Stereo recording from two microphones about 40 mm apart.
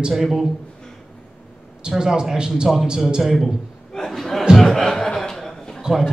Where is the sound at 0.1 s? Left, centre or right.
Centre.